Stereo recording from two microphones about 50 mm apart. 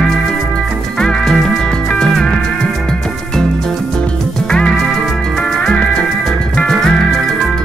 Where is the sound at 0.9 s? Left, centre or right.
Centre.